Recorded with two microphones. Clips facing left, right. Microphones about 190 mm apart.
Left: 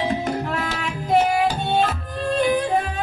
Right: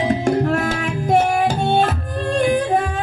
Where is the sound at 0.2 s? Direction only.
45° right (ahead or behind).